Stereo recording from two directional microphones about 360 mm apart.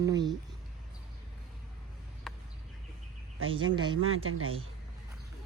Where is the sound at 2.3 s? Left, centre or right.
Centre.